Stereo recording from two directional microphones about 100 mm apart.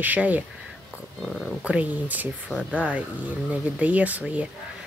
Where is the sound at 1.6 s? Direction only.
10° right (ahead or behind).